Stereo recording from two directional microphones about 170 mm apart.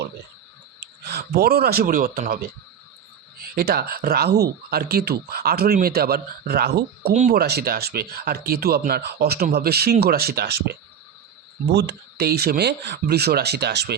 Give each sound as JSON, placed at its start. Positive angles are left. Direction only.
{"t": 0.8, "sound": "speech", "side_deg": -70}
{"t": 7.1, "sound": "speech", "side_deg": -45}
{"t": 7.3, "sound": "speech", "side_deg": -70}